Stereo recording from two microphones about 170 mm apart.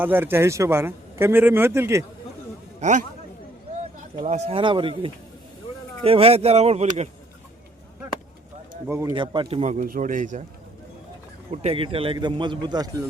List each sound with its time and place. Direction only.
0.0 s a man's voice: 10° right (ahead or behind)
2.8 s a man's voice: 45° right (ahead or behind)
4.3 s speech: 40° right (ahead or behind)
8.9 s a man's voice: 15° right (ahead or behind)
9.1 s a man's voice: 30° right (ahead or behind); by 10.4 s 50° right (ahead or behind)
11.5 s a man's voice: 35° right (ahead or behind)